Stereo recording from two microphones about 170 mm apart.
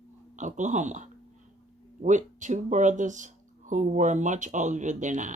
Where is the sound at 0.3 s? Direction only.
45° right (ahead or behind).